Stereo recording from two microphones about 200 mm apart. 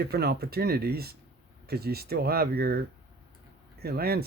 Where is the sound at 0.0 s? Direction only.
50° right (ahead or behind).